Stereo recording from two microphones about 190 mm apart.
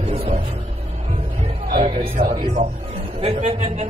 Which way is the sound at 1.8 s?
30° right (ahead or behind).